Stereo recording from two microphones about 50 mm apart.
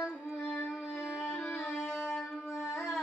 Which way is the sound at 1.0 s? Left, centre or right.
Left.